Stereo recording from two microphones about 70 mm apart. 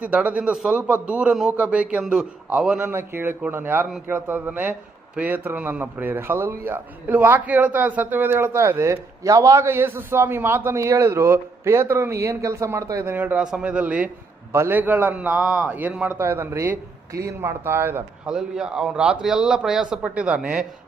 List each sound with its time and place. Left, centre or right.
0.0 s a man's voice: centre
2.9 s a man's voice: right
9.6 s a man's voice: right
13.1 s a man's voice: right
13.3 s a man's voice: centre
16.1 s a man's voice: right
17.1 s speech: right
17.4 s a man's voice: right
18.3 s a man's voice: centre